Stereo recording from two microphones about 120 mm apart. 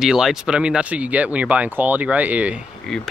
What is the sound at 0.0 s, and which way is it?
Speech, 5° right (ahead or behind).